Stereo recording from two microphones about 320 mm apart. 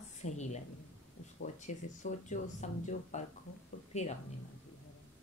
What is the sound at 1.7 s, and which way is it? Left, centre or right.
Speech, left.